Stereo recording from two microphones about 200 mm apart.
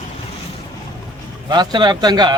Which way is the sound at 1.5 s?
20° right (ahead or behind).